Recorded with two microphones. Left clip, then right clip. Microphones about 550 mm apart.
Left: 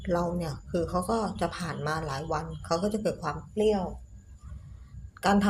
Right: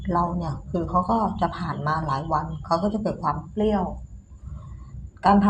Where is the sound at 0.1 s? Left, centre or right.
Left.